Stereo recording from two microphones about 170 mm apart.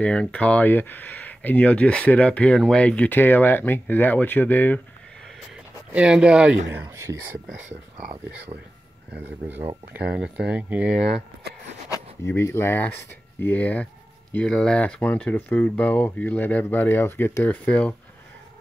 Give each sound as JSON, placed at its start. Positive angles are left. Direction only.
{"t": 0.0, "sound": "speech", "side_deg": 5}
{"t": 5.9, "sound": "speech", "side_deg": -5}
{"t": 6.7, "sound": "speech", "side_deg": -15}
{"t": 10.1, "sound": "speech", "side_deg": -5}
{"t": 12.3, "sound": "speech", "side_deg": 15}